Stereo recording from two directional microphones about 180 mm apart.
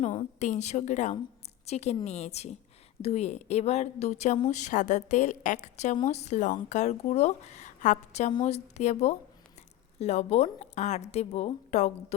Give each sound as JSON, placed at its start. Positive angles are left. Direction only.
{"t": 0.0, "sound": "a woman's voice", "side_deg": 35}